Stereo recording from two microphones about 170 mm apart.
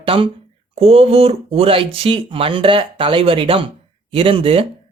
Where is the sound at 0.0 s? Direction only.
30° right (ahead or behind).